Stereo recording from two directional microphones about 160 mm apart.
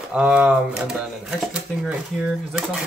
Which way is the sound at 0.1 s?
5° right (ahead or behind).